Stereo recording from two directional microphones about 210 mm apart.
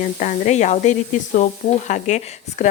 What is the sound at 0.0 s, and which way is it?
Speech, 35° left (ahead or behind).